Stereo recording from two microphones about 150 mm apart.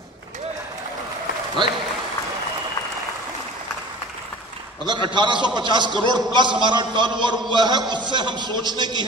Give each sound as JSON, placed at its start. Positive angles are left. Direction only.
{"t": 4.8, "sound": "a man's voice", "side_deg": -30}